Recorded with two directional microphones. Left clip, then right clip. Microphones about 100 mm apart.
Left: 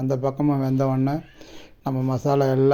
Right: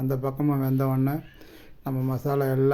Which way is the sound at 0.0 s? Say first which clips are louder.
Left 4 dB; 10° left (ahead or behind).